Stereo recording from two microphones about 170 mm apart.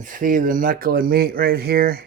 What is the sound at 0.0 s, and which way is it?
Speech, 55° right (ahead or behind).